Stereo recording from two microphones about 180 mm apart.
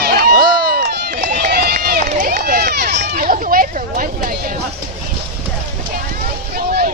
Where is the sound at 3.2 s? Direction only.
50° right (ahead or behind).